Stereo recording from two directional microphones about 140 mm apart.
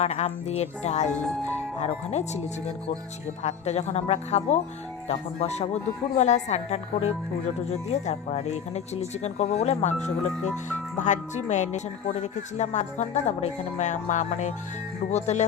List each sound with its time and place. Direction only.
0.0 s speech: 50° left (ahead or behind)
1.1 s speech: 5° left (ahead or behind)
1.8 s speech: 50° left (ahead or behind)
3.4 s speech: 50° left (ahead or behind)
10.9 s speech: 60° left (ahead or behind)